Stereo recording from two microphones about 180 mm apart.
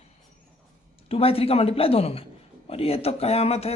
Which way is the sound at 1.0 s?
30° left (ahead or behind).